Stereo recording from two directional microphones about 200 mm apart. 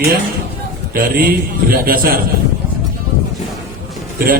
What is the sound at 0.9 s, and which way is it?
A man's voice, 50° right (ahead or behind).